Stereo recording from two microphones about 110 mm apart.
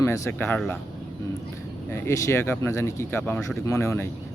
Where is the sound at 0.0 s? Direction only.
25° left (ahead or behind).